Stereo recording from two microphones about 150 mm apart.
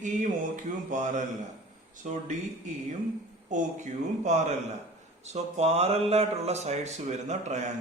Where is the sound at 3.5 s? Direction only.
55° right (ahead or behind).